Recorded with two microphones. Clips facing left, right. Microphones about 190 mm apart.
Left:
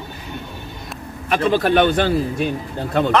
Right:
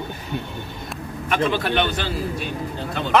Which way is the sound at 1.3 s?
45° left (ahead or behind).